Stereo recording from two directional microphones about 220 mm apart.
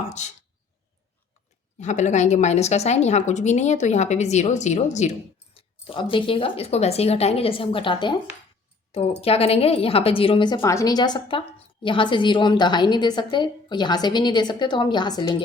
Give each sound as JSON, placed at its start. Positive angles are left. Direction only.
{"t": 0.1, "sound": "a woman's voice", "side_deg": 30}
{"t": 1.8, "sound": "a woman's voice", "side_deg": 30}
{"t": 9.2, "sound": "a woman's voice", "side_deg": 25}